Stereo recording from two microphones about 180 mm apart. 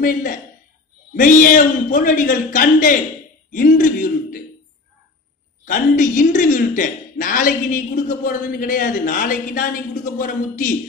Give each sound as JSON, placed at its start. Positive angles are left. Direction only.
{"t": 0.0, "sound": "a man's voice", "side_deg": 50}
{"t": 5.7, "sound": "a man's voice", "side_deg": 45}